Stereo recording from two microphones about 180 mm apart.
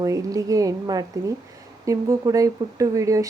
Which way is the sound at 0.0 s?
20° right (ahead or behind).